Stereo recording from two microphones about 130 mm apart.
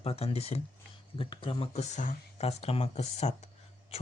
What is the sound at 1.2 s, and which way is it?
Speech, 40° left (ahead or behind).